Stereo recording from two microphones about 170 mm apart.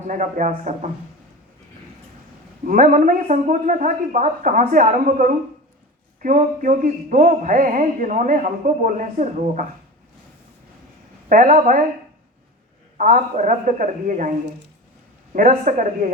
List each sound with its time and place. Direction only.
0.1 s speech: 50° right (ahead or behind)
2.6 s speech: 50° right (ahead or behind)
11.3 s speech: 50° right (ahead or behind)
13.0 s speech: 50° right (ahead or behind)